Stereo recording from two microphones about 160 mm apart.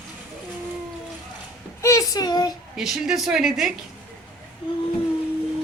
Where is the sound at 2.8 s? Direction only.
5° right (ahead or behind).